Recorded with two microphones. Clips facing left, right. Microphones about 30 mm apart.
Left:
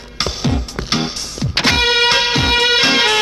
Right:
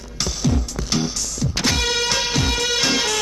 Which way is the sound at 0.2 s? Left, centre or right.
Left.